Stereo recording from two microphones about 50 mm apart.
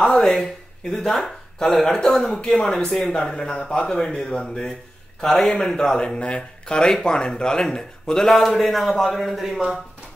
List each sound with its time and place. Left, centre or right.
0.0 s speech: centre
0.3 s a man's voice: centre